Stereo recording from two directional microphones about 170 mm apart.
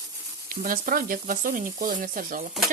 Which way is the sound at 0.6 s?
55° right (ahead or behind).